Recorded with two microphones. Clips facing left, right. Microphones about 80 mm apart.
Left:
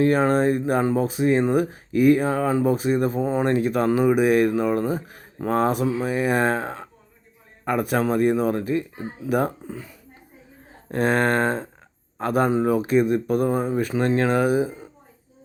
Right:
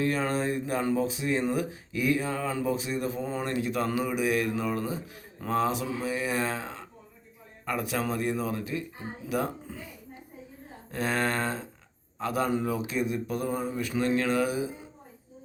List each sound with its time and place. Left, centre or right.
0.0 s speech: left
10.9 s speech: left